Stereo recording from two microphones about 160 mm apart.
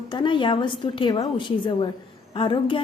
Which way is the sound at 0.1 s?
30° left (ahead or behind).